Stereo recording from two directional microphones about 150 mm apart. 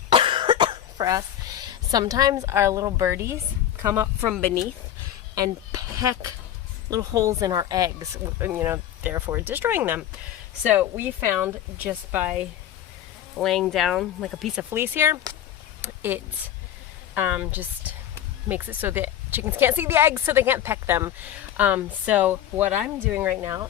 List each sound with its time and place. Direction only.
0.1 s cough: 35° right (ahead or behind)
3.8 s speech: 15° right (ahead or behind)
13.3 s speech: centre (ahead or behind); by 15.2 s 15° right (ahead or behind)
15.8 s a sound: 15° right (ahead or behind)
17.2 s speech: 10° right (ahead or behind)